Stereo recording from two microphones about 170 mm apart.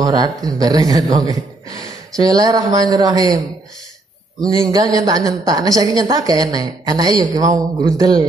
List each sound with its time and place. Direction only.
0.0 s a woman's voice: 20° right (ahead or behind)
4.4 s a woman's voice: 20° right (ahead or behind)